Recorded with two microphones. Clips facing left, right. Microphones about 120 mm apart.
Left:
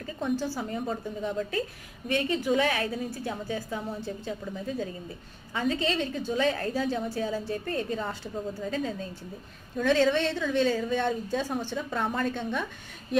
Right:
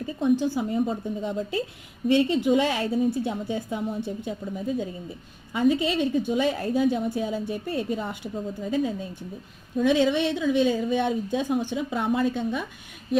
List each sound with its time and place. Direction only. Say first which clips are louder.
0.0 s a woman's voice: right 7 dB; 20° right (ahead or behind)